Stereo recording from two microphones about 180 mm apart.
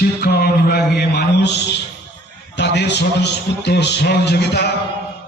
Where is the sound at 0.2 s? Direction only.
65° left (ahead or behind).